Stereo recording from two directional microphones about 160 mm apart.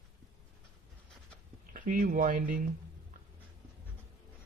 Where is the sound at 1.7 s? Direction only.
60° right (ahead or behind).